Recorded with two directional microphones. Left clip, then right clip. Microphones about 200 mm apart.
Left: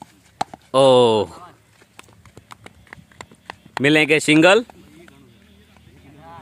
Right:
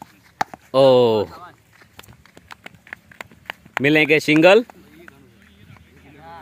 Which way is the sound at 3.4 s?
15° right (ahead or behind).